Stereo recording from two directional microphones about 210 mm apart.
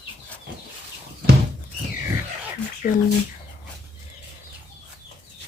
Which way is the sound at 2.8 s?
45° left (ahead or behind).